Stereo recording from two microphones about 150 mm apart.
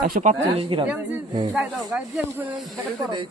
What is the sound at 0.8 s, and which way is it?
Speech, 10° right (ahead or behind).